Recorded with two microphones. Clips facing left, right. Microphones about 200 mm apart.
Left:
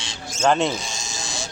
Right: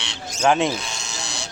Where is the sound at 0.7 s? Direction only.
65° right (ahead or behind).